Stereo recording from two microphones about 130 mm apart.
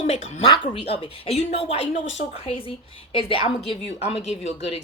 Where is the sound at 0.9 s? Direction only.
50° left (ahead or behind).